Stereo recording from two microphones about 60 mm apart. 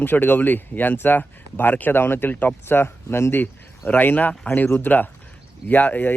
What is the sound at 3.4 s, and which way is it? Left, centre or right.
Speech, left.